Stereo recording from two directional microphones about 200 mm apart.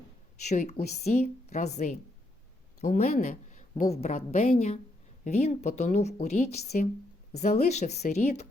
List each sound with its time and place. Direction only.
0.4 s a woman's voice: 35° left (ahead or behind)